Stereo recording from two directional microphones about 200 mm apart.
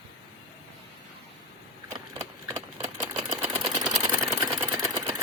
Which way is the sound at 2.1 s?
20° right (ahead or behind).